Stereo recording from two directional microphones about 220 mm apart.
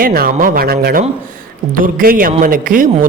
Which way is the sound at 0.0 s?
40° right (ahead or behind).